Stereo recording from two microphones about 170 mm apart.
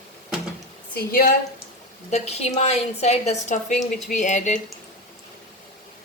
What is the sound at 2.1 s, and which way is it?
A woman's voice, 40° left (ahead or behind).